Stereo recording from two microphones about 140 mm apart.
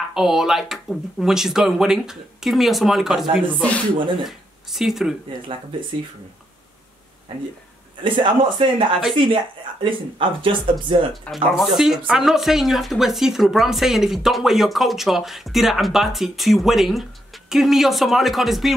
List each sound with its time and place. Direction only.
0.1 s speech: 5° right (ahead or behind)
5.5 s speech: 35° right (ahead or behind)
8.0 s speech: 35° right (ahead or behind)
11.5 s speech: centre (ahead or behind)